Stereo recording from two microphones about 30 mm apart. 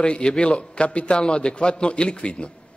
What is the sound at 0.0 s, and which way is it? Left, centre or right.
A man's voice, left.